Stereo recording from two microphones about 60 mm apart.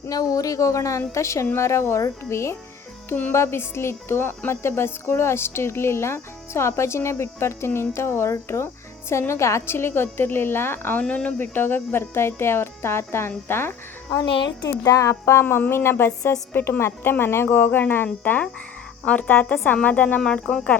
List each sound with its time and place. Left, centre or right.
0.1 s a woman's voice: left
11.1 s a woman's voice: left
11.5 s speech: left
14.1 s speech: left
15.2 s a woman's voice: left
20.2 s speech: centre